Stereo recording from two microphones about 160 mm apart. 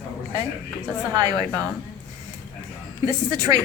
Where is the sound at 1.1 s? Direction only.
25° right (ahead or behind).